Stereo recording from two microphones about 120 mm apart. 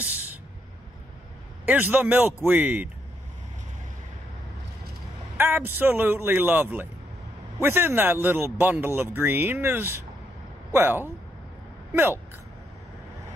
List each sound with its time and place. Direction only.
1.7 s speech: 15° right (ahead or behind)
5.4 s speech: 15° right (ahead or behind)